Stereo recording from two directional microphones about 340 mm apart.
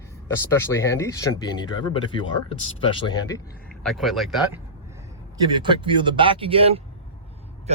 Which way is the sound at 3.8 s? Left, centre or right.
Centre.